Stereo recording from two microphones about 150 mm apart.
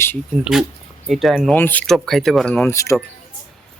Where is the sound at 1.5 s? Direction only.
10° left (ahead or behind).